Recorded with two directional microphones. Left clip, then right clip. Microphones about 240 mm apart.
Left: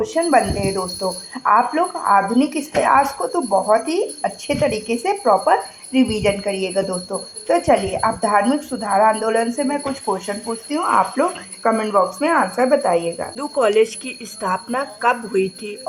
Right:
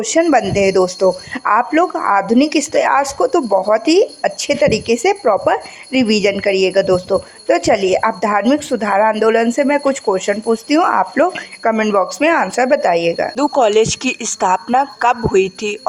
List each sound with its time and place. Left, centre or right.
0.0 s speech: right
13.3 s speech: right